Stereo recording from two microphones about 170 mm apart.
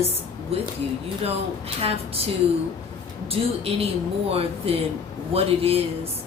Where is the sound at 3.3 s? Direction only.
35° right (ahead or behind).